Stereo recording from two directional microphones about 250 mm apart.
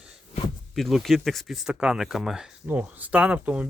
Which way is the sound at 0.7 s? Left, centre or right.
Centre.